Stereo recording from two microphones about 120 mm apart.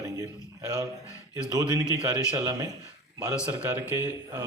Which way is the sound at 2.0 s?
30° right (ahead or behind).